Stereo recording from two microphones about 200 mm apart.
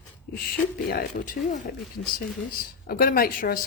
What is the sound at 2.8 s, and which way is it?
Speech, 45° left (ahead or behind).